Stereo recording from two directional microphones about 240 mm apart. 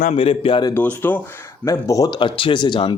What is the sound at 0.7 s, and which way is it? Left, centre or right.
A man's voice, centre.